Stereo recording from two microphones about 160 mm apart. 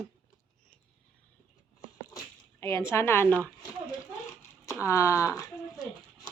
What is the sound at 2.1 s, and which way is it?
Speech, 15° left (ahead or behind).